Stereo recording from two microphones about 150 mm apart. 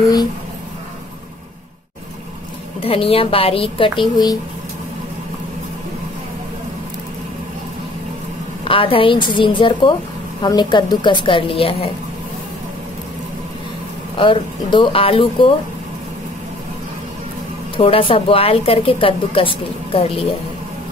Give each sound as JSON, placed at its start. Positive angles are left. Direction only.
{"t": 2.8, "sound": "a woman's voice", "side_deg": 40}
{"t": 8.6, "sound": "a woman's voice", "side_deg": 35}
{"t": 14.1, "sound": "a woman's voice", "side_deg": 35}
{"t": 17.7, "sound": "a woman's voice", "side_deg": 35}